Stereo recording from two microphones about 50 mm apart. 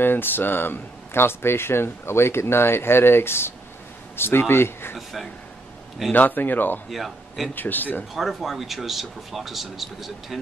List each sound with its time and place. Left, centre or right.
0.0 s speech: left
4.9 s speech: centre
6.1 s speech: left
6.9 s a man's voice: centre
7.5 s speech: left
8.1 s speech: centre